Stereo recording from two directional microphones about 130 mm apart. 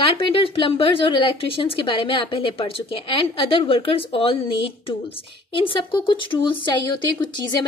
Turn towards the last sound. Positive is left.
turn(degrees=30)  # may be behind; listen again after turning